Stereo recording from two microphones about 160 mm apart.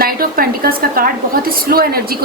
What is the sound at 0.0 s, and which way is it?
A woman's voice, 65° right (ahead or behind).